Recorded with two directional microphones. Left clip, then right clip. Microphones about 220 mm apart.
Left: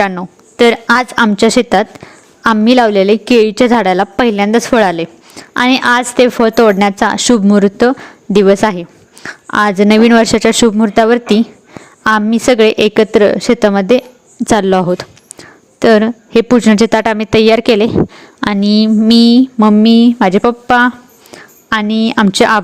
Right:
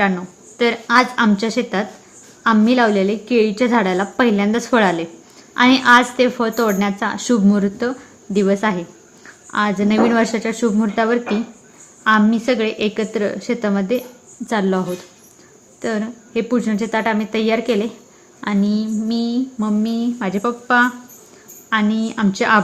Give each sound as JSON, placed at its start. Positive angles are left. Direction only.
{"t": 0.0, "sound": "a woman's voice", "side_deg": 45}